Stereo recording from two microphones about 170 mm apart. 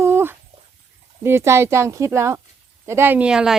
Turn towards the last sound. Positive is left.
turn(degrees=-5)  # may be behind; listen again after turning